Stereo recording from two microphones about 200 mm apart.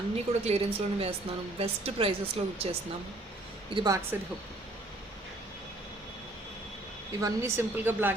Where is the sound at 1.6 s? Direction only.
25° right (ahead or behind).